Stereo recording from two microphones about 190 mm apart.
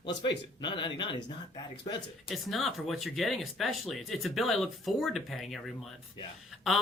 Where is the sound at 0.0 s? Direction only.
25° left (ahead or behind).